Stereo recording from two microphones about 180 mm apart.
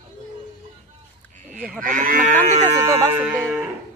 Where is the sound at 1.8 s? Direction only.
50° right (ahead or behind).